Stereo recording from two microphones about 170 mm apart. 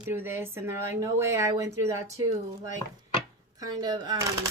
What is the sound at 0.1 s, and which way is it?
Speech, 15° right (ahead or behind).